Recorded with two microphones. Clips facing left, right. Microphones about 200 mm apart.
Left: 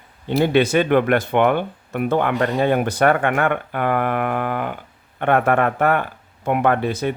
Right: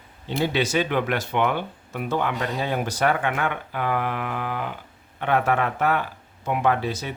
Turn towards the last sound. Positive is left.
turn(degrees=55)  # may be behind; listen again after turning